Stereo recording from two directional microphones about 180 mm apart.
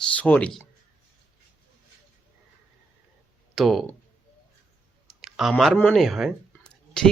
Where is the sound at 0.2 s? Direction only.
10° left (ahead or behind).